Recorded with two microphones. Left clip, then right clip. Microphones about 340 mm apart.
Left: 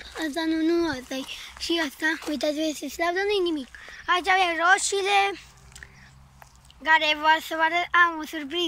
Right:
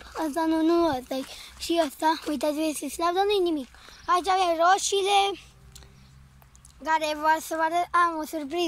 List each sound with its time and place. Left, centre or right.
0.0 s speech: centre
6.8 s speech: centre